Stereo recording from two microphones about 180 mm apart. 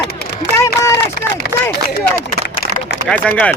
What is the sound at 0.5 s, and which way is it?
Speech, 15° left (ahead or behind).